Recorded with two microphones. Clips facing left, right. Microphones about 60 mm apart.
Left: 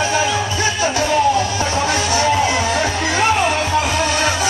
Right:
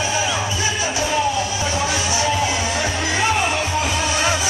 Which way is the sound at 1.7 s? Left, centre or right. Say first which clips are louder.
Left 4 dB; left.